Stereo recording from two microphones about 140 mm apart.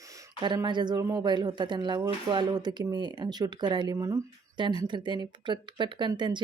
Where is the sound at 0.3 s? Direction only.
30° right (ahead or behind).